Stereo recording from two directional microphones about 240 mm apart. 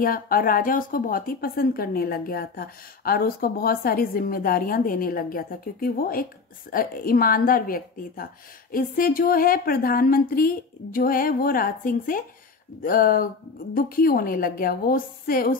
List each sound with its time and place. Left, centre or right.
0.0 s speech: left